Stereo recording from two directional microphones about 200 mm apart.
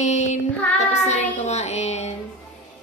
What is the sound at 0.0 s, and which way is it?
Child singing, 35° left (ahead or behind).